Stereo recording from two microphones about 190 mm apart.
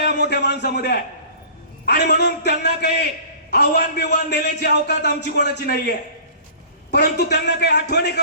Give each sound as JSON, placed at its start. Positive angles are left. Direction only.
{"t": 0.3, "sound": "a man's voice", "side_deg": 60}
{"t": 2.0, "sound": "a man's voice", "side_deg": 60}
{"t": 6.9, "sound": "a man's voice", "side_deg": 60}